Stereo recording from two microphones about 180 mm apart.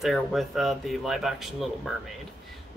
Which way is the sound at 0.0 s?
Centre (ahead or behind).